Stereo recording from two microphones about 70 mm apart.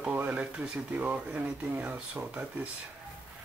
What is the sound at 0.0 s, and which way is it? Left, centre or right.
Speech, right.